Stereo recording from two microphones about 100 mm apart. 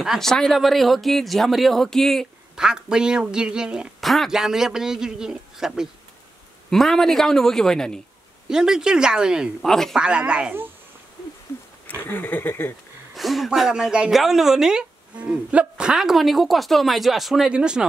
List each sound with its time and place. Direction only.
0.0 s speech: centre (ahead or behind)
2.5 s speech: 10° right (ahead or behind)
8.5 s speech: 5° right (ahead or behind)
9.6 s speech: 5° left (ahead or behind)
9.9 s speech: 10° right (ahead or behind)
12.0 s speech: 20° left (ahead or behind)
13.1 s speech: centre (ahead or behind)